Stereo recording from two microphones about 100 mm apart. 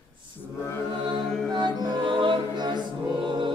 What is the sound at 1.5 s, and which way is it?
Music, 45° right (ahead or behind).